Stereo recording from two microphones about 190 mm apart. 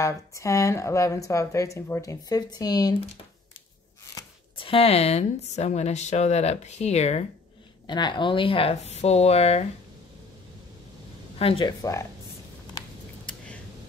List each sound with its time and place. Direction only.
0.0 s speech: 15° left (ahead or behind)
4.1 s a sound: 15° left (ahead or behind)
4.6 s speech: 30° left (ahead or behind)
7.8 s speech: 25° left (ahead or behind)
11.3 s speech: 30° left (ahead or behind)